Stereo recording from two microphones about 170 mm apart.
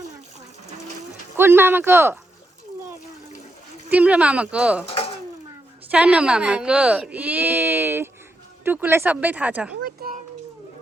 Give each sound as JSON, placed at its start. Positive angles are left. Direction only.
{"t": 1.4, "sound": "speech", "side_deg": -15}
{"t": 3.8, "sound": "speech", "side_deg": -10}
{"t": 4.9, "sound": "dishes", "side_deg": 35}
{"t": 5.9, "sound": "speech", "side_deg": -5}
{"t": 10.0, "sound": "a sound", "side_deg": -65}